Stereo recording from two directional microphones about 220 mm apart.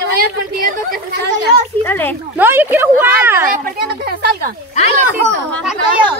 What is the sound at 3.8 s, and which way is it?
Speech, 45° right (ahead or behind).